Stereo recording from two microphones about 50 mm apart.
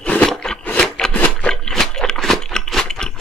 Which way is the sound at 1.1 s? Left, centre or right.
Left.